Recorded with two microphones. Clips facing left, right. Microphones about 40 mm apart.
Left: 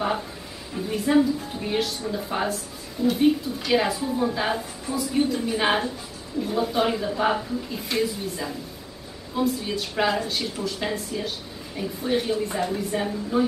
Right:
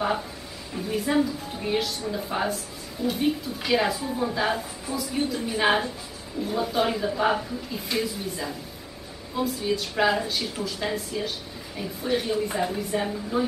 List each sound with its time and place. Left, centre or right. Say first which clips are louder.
0.7 s a woman's voice: left 3 dB; centre